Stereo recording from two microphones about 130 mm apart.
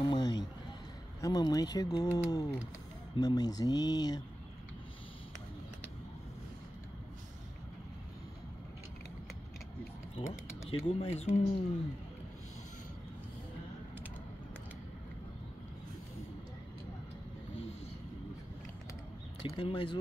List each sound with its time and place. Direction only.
0.0 s a sound: 30° left (ahead or behind)
1.2 s speech: 30° left (ahead or behind)
10.2 s speech: 40° left (ahead or behind)
19.4 s speech: 40° left (ahead or behind)